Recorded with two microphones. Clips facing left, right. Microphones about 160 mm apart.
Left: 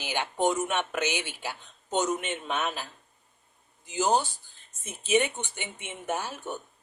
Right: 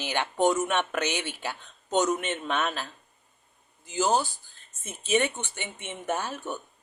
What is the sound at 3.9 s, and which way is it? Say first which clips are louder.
Speech: even; 15° left (ahead or behind).